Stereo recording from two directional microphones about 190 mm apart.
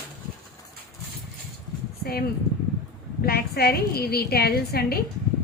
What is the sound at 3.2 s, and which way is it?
A woman's voice, 55° left (ahead or behind).